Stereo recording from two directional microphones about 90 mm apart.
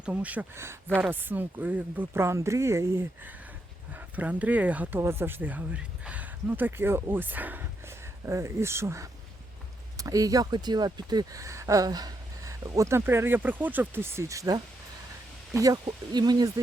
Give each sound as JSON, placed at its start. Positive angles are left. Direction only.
{"t": 0.0, "sound": "speech", "side_deg": -15}
{"t": 0.5, "sound": "speech", "side_deg": -30}
{"t": 2.1, "sound": "speech", "side_deg": -30}
{"t": 3.9, "sound": "speech", "side_deg": -15}
{"t": 4.9, "sound": "speech", "side_deg": -25}
{"t": 10.0, "sound": "speech", "side_deg": -40}
{"t": 11.3, "sound": "speech", "side_deg": -35}
{"t": 15.9, "sound": "speech", "side_deg": -50}